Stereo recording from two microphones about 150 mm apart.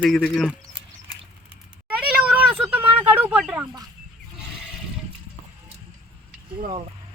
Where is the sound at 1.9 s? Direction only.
10° right (ahead or behind).